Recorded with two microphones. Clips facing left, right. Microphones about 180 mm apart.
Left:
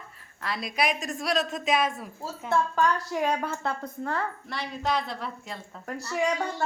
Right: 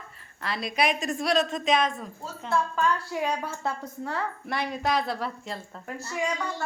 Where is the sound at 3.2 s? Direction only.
60° left (ahead or behind).